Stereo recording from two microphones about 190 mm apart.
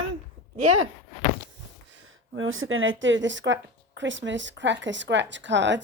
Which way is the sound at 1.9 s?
90° right.